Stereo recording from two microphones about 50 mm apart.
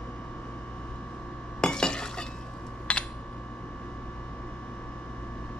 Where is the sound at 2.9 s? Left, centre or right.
Left.